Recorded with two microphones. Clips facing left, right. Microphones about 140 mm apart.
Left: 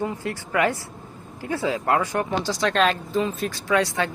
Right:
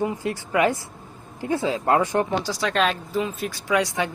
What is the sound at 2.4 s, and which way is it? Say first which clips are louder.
Speech: left 2 dB; 10° right (ahead or behind).